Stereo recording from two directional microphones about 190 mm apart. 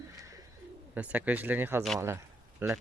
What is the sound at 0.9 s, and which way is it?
Speech, 10° right (ahead or behind).